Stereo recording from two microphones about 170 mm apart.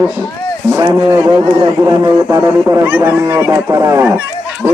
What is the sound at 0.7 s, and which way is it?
Speech, 25° right (ahead or behind).